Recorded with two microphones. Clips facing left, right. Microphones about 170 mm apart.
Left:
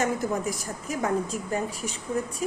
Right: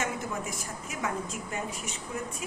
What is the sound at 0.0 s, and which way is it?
A woman's voice, 40° left (ahead or behind).